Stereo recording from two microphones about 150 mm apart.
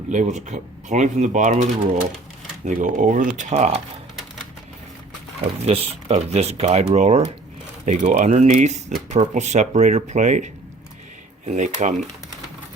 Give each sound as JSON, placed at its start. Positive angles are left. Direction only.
{"t": 0.1, "sound": "speech", "side_deg": -55}
{"t": 2.6, "sound": "speech", "side_deg": -55}
{"t": 5.6, "sound": "speech", "side_deg": -40}